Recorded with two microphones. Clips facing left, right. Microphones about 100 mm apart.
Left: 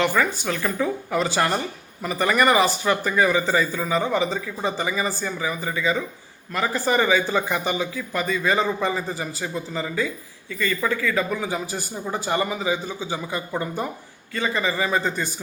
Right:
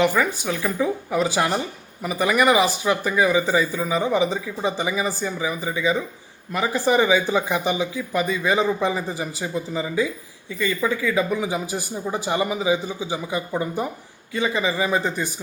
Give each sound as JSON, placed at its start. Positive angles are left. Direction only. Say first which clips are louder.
{"t": 0.0, "sound": "speech", "louder": "right 1 dB", "side_deg": -10}